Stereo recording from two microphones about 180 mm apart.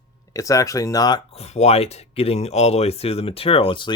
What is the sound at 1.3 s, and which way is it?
Speech, 35° left (ahead or behind).